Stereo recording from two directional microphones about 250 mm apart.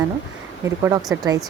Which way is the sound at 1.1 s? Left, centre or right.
Centre.